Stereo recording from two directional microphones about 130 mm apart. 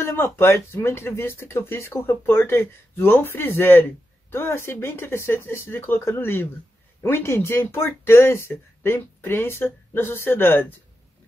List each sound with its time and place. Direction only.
0.0 s speech: 15° left (ahead or behind)